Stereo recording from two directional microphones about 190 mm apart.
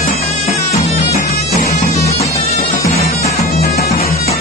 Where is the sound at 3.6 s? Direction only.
55° left (ahead or behind).